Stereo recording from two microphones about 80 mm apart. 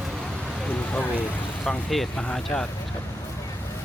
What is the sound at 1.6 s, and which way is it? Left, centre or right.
Speech, centre.